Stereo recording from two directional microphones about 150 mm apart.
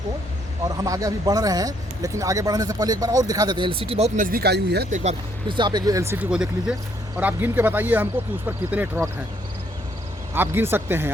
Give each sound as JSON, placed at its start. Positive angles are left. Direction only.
{"t": 0.9, "sound": "speech", "side_deg": -20}
{"t": 4.2, "sound": "speech", "side_deg": -80}
{"t": 4.9, "sound": "speech", "side_deg": -50}
{"t": 5.5, "sound": "speech", "side_deg": -30}
{"t": 6.3, "sound": "speech", "side_deg": -5}
{"t": 10.3, "sound": "speech", "side_deg": -15}